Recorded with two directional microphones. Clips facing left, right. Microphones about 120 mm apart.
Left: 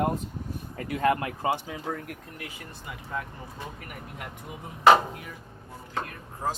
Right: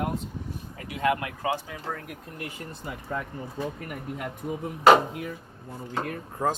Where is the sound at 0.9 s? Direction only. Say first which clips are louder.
Left 1 dB; 35° left (ahead or behind).